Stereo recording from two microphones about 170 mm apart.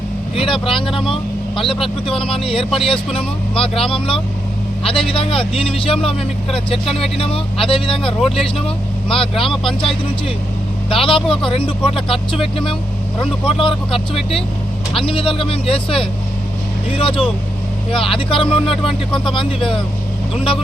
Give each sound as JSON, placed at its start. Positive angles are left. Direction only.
{"t": 0.3, "sound": "a man's voice", "side_deg": 30}